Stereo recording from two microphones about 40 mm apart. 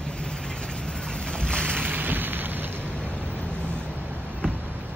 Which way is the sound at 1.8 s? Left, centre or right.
Right.